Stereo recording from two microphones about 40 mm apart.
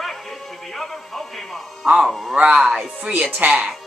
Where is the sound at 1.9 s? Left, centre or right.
Centre.